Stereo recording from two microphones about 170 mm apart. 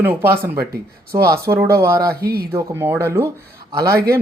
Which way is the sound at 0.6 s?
65° right (ahead or behind).